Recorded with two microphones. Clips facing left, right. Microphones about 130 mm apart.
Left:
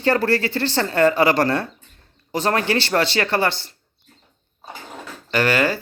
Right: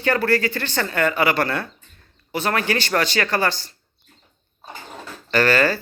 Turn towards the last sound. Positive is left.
turn(degrees=15)  # may be behind; listen again after turning